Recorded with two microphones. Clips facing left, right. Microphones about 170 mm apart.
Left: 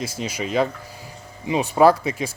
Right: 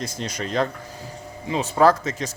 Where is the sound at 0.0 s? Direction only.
5° left (ahead or behind).